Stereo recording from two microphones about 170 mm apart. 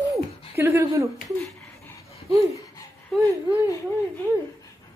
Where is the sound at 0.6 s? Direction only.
15° right (ahead or behind).